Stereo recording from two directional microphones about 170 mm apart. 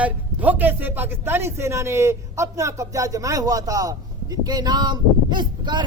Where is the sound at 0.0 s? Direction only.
10° right (ahead or behind).